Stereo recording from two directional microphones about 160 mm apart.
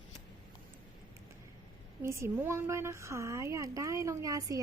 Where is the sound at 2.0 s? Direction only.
15° right (ahead or behind).